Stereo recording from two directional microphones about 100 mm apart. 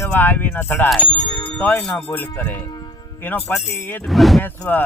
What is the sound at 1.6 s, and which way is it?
Speech, 20° left (ahead or behind).